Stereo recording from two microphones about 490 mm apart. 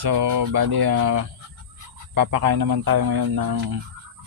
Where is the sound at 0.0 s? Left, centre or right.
Right.